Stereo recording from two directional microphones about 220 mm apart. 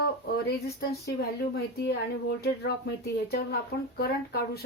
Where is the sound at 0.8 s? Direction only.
45° left (ahead or behind).